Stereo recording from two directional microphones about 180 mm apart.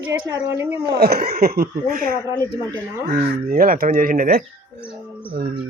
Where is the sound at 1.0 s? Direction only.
60° right (ahead or behind).